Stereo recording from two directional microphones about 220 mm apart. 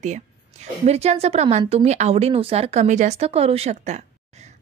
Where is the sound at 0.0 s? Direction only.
30° right (ahead or behind).